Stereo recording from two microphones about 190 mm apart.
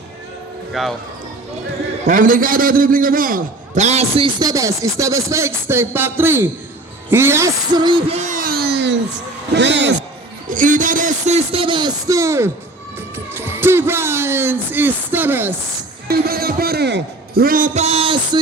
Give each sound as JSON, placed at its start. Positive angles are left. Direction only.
{"t": 0.7, "sound": "speech", "side_deg": 0}
{"t": 2.0, "sound": "a man's voice", "side_deg": -45}
{"t": 4.4, "sound": "music", "side_deg": -15}
{"t": 7.1, "sound": "a sound", "side_deg": -10}
{"t": 9.6, "sound": "speech", "side_deg": -70}
{"t": 10.5, "sound": "speech", "side_deg": -45}
{"t": 16.0, "sound": "a man's voice", "side_deg": -55}